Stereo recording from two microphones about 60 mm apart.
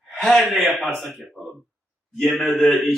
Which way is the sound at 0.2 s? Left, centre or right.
Centre.